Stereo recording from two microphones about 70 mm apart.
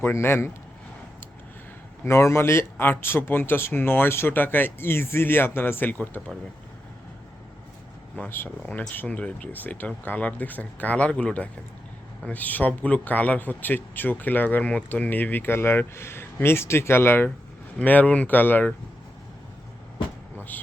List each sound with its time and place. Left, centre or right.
0.0 s speech: left
2.0 s speech: left
8.2 s speech: left
17.7 s speech: left